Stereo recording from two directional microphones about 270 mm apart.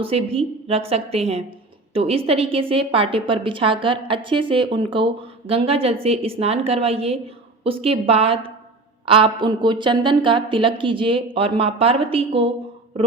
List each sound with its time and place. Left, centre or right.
0.0 s a woman's voice: right